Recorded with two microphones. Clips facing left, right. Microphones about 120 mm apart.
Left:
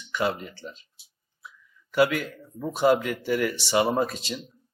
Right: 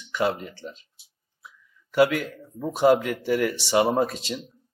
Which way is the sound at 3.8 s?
30° right (ahead or behind).